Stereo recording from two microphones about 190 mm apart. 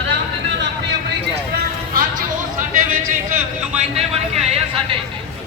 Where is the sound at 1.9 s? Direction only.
45° right (ahead or behind).